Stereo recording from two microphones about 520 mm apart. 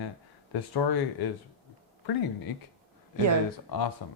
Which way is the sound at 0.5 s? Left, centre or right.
Left.